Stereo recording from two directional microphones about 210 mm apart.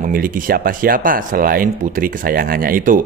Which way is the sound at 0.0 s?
45° right (ahead or behind).